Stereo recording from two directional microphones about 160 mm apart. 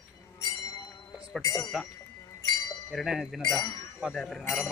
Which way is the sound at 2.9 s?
Centre (ahead or behind).